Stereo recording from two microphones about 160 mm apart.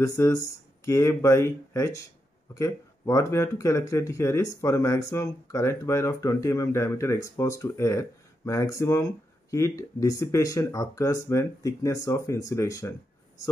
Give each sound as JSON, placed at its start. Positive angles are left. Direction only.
{"t": 0.0, "sound": "speech", "side_deg": 20}